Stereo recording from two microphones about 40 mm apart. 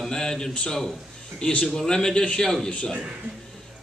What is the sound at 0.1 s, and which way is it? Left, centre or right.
Speech, centre.